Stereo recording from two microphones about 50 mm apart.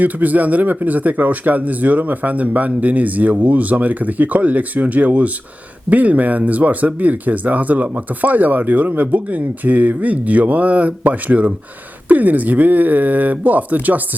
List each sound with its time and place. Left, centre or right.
0.0 s speech: right